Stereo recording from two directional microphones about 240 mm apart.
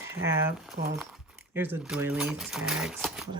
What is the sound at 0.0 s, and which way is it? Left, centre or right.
Speech, centre.